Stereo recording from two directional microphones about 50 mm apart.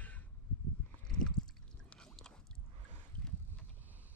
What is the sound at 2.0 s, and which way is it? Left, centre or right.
Boat, centre.